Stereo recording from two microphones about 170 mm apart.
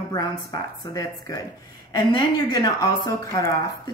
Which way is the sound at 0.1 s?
20° left (ahead or behind).